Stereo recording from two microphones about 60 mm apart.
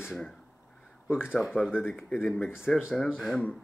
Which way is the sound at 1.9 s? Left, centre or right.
Centre.